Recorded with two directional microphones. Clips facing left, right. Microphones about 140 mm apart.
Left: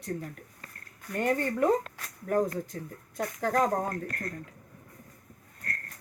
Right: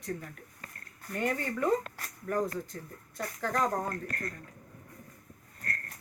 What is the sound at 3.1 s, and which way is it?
Speech, 50° left (ahead or behind).